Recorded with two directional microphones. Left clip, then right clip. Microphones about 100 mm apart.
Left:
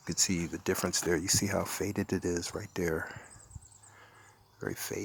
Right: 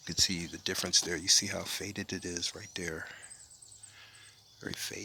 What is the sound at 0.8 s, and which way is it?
Speech, 40° left (ahead or behind).